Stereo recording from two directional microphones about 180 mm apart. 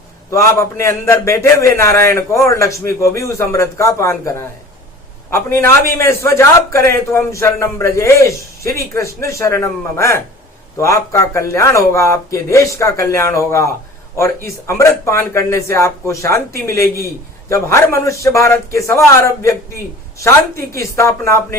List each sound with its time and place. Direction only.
0.3 s a man's voice: 15° left (ahead or behind)